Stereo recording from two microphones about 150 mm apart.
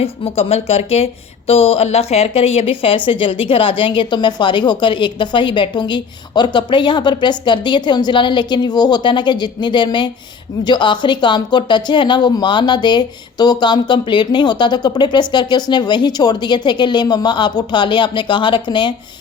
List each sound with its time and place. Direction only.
0.0 s a woman's voice: 40° left (ahead or behind)